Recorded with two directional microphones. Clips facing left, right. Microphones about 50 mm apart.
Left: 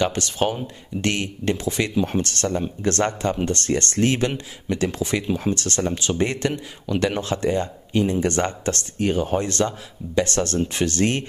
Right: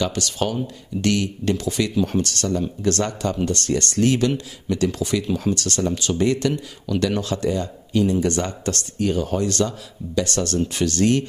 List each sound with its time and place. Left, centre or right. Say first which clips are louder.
0.0 s speech: left 2 dB; left